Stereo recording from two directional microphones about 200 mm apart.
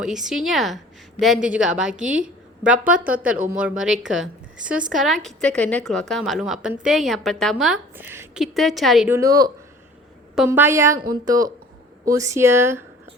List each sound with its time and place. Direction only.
0.0 s a woman's voice: centre (ahead or behind)
8.5 s a woman's voice: centre (ahead or behind)
9.0 s speech: 15° right (ahead or behind)
12.0 s speech: 15° right (ahead or behind)